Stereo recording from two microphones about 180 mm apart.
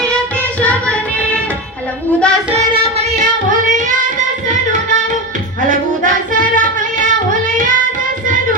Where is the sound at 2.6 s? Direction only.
35° right (ahead or behind).